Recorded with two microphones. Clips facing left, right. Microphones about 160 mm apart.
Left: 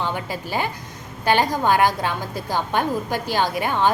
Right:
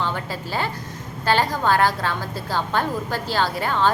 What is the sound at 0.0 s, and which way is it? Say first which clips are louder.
A woman's voice: even; 15° left (ahead or behind).